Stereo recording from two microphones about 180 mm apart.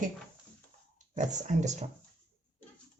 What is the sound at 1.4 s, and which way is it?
Speech, 40° right (ahead or behind).